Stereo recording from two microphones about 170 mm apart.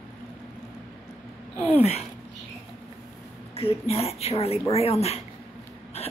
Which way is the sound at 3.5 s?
35° left (ahead or behind).